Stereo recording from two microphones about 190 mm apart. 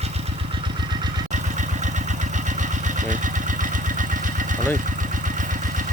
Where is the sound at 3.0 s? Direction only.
40° right (ahead or behind).